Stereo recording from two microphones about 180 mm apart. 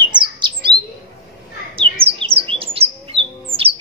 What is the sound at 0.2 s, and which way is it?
Bird, 25° right (ahead or behind).